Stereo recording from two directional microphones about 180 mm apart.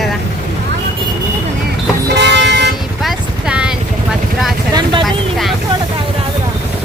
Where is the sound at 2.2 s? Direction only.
70° right (ahead or behind).